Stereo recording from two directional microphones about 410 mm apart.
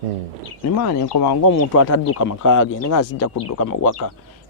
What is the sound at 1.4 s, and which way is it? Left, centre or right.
Speech, left.